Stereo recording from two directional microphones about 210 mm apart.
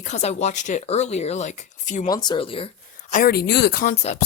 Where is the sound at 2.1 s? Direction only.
20° left (ahead or behind).